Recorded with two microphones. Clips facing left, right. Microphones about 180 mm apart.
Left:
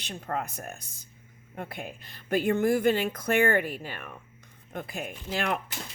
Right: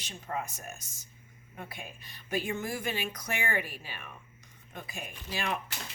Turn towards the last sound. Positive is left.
turn(degrees=55)  # may be behind; listen again after turning